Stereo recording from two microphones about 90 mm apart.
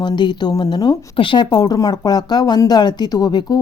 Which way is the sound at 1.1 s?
70° left (ahead or behind).